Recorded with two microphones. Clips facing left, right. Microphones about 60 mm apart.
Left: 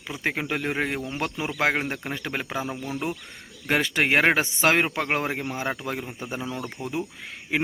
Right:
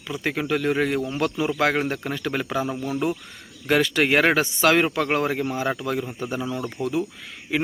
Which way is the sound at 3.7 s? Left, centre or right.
Left.